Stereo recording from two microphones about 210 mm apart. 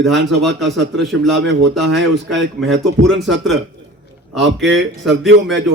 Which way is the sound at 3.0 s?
60° right (ahead or behind).